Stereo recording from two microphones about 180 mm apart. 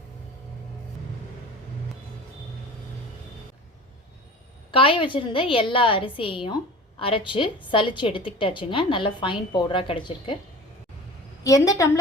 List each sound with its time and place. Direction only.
4.7 s a woman's voice: 30° left (ahead or behind)
11.4 s a woman's voice: 20° left (ahead or behind)